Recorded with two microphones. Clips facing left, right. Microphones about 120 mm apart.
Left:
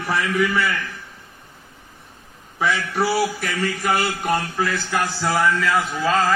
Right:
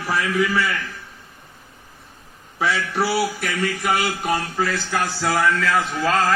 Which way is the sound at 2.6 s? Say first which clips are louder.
Even; 5° right (ahead or behind).